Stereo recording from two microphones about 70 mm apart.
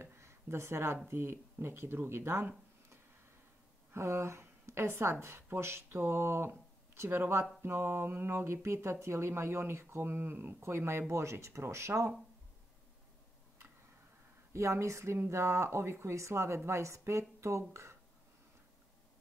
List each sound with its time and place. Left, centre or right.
0.0 s a sound: right
1.0 s speech: right
3.9 s a woman's voice: right
14.5 s speech: right